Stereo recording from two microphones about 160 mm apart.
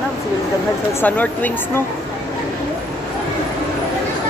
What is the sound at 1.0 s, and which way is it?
Speech, 10° left (ahead or behind).